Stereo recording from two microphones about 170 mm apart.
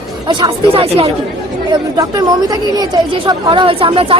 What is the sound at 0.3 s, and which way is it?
Speech, 25° right (ahead or behind).